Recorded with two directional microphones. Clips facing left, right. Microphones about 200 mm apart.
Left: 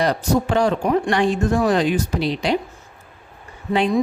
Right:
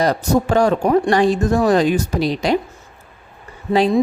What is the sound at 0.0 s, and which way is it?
A woman's voice, 40° right (ahead or behind).